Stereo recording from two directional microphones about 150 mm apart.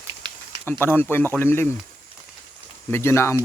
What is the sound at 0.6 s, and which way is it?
Speech, 15° left (ahead or behind).